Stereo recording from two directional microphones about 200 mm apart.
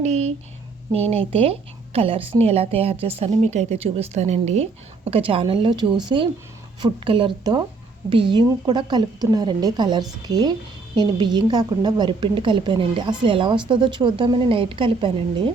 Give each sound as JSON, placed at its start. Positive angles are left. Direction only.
{"t": 0.0, "sound": "a woman's voice", "side_deg": -35}